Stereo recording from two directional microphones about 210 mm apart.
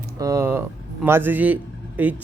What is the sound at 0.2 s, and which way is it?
Speech, 15° right (ahead or behind).